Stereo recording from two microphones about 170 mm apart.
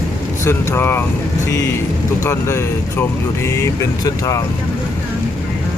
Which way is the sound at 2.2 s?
15° left (ahead or behind).